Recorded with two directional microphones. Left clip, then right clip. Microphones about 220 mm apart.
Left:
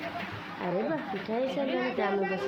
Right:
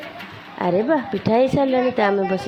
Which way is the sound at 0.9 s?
35° right (ahead or behind).